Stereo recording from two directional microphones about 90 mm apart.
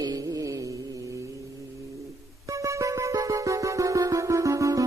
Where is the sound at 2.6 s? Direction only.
35° right (ahead or behind).